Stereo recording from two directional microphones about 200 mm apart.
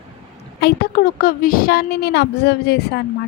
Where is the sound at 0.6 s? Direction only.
50° left (ahead or behind).